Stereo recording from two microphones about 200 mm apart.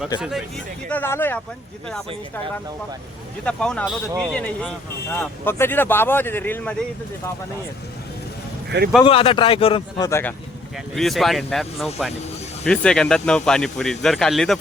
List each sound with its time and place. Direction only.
0.2 s speech: centre (ahead or behind)
0.9 s speech: 10° left (ahead or behind)
3.4 s speech: 5° left (ahead or behind)
8.7 s a man's voice: 60° right (ahead or behind)
9.0 s a man's voice: 25° left (ahead or behind)
10.1 s speech: 10° left (ahead or behind)
10.9 s speech: centre (ahead or behind)